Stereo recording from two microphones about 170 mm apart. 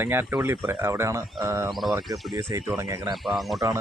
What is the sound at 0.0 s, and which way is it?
Speech, 10° right (ahead or behind).